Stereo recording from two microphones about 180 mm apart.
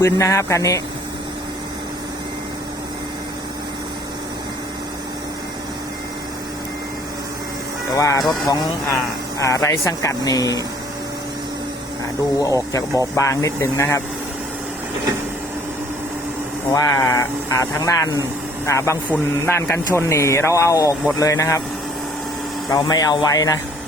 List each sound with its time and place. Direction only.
0.0 s speech: 15° left (ahead or behind)
7.9 s speech: 20° left (ahead or behind)
12.4 s speech: 20° left (ahead or behind)
16.7 s speech: 20° left (ahead or behind)
22.7 s speech: 20° left (ahead or behind)